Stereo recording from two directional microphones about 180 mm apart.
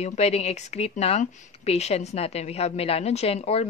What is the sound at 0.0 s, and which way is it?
Speech, 35° left (ahead or behind).